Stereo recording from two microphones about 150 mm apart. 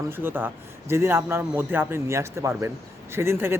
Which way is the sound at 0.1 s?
15° right (ahead or behind).